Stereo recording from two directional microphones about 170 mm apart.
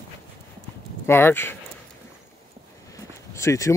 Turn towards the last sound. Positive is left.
turn(degrees=15)  # may be behind; listen again after turning